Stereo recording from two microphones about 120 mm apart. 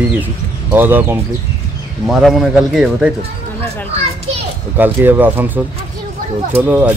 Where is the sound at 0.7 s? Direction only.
15° right (ahead or behind).